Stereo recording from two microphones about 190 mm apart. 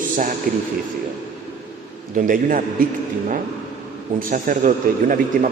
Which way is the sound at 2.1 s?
45° right (ahead or behind).